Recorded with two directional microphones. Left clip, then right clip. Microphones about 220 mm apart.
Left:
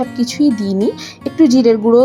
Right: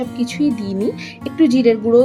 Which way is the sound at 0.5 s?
45° left (ahead or behind).